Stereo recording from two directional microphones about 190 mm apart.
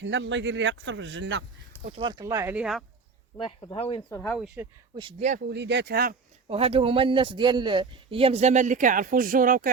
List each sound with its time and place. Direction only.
0.0 s a man's voice: 70° right (ahead or behind)
1.8 s speech: 30° right (ahead or behind); by 2.8 s 5° right (ahead or behind)
3.3 s speech: 25° left (ahead or behind)
4.1 s speech: 5° left (ahead or behind)
4.5 s speech: 25° right (ahead or behind)
5.5 s speech: 65° right (ahead or behind)
6.5 s speech: 30° right (ahead or behind); by 9.7 s 45° right (ahead or behind)